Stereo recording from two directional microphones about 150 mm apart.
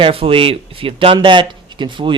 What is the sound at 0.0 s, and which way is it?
Speech, 40° right (ahead or behind).